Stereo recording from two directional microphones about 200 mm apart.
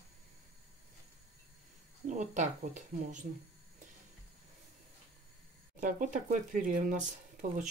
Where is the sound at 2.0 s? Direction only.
35° right (ahead or behind).